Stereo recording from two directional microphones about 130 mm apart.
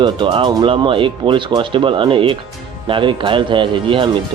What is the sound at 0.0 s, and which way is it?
Speech, 40° right (ahead or behind).